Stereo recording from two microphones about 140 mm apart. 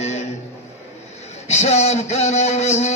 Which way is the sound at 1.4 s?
50° left (ahead or behind).